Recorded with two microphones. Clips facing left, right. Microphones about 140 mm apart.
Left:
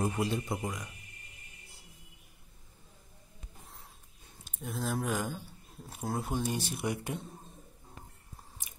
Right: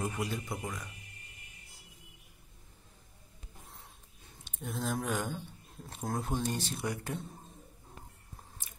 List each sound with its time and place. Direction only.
0.0 s a man's voice: 25° left (ahead or behind)
4.5 s speech: centre (ahead or behind); by 7.2 s 15° left (ahead or behind)